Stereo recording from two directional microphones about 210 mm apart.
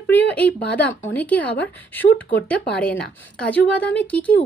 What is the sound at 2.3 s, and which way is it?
Speech, 50° left (ahead or behind).